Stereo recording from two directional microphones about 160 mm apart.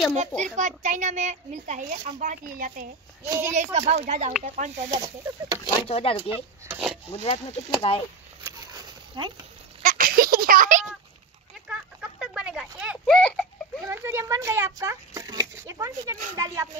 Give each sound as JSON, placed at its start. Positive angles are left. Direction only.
{"t": 0.4, "sound": "a child's voice", "side_deg": -50}
{"t": 3.3, "sound": "speech", "side_deg": -15}
{"t": 3.5, "sound": "a child's voice", "side_deg": -45}
{"t": 4.9, "sound": "speech", "side_deg": -20}
{"t": 5.9, "sound": "speech", "side_deg": 35}
{"t": 6.3, "sound": "speech", "side_deg": -10}
{"t": 7.2, "sound": "speech", "side_deg": 35}
{"t": 8.5, "sound": "a sound", "side_deg": -20}
{"t": 9.8, "sound": "a sound", "side_deg": -65}
{"t": 11.6, "sound": "a sound", "side_deg": -5}
{"t": 13.0, "sound": "a sound", "side_deg": 5}
{"t": 13.8, "sound": "speech", "side_deg": -15}